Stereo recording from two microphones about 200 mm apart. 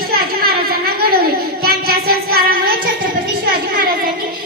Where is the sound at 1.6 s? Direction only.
50° right (ahead or behind).